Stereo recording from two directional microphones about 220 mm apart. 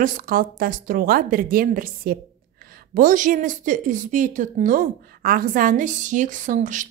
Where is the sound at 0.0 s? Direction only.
40° right (ahead or behind).